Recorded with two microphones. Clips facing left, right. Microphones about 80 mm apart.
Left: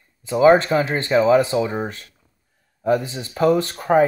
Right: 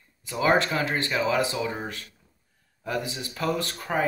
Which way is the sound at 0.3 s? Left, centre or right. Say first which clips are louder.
Left 9 dB; left.